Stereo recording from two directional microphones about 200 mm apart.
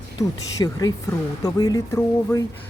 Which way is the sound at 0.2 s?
20° left (ahead or behind).